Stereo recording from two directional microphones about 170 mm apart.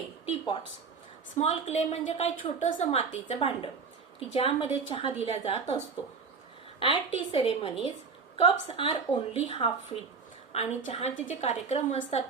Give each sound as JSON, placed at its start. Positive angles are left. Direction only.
{"t": 0.3, "sound": "a sound", "side_deg": 30}
{"t": 1.4, "sound": "a woman's voice", "side_deg": 40}
{"t": 6.7, "sound": "a woman's voice", "side_deg": 30}